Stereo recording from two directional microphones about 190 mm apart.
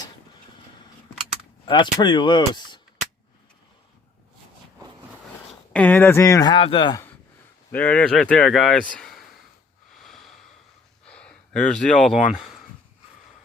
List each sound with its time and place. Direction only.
1.6 s speech: 25° left (ahead or behind)
5.5 s speech: 5° left (ahead or behind); by 7.1 s 20° left (ahead or behind)
7.7 s speech: 5° left (ahead or behind)
10.0 s a sound: centre (ahead or behind)
11.0 s speech: 5° left (ahead or behind)